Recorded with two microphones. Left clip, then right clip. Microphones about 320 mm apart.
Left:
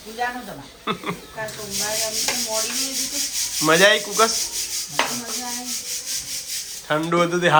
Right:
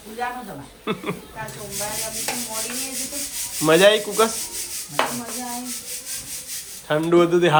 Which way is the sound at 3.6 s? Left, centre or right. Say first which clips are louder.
Right 1 dB; centre.